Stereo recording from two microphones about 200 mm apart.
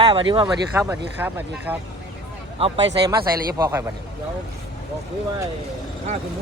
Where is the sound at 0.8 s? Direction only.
10° right (ahead or behind).